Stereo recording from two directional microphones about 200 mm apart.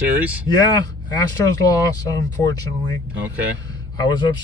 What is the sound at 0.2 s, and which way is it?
Speech, 5° right (ahead or behind).